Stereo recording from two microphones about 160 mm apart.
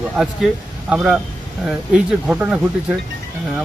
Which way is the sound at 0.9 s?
5° right (ahead or behind).